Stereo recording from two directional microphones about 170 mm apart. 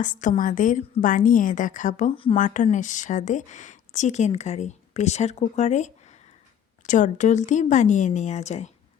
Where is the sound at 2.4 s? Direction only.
45° left (ahead or behind).